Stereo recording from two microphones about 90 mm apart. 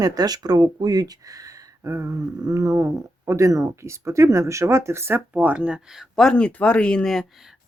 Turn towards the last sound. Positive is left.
turn(degrees=0)  # may be behind; listen again after turning